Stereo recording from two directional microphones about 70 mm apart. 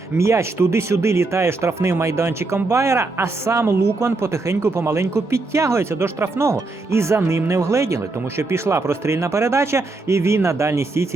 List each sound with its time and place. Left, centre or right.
0.2 s speech: right